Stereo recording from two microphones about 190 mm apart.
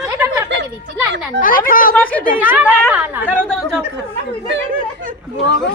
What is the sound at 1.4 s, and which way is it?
Speech, 45° left (ahead or behind).